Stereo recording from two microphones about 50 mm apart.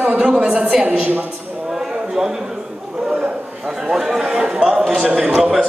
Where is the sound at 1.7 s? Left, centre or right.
Centre.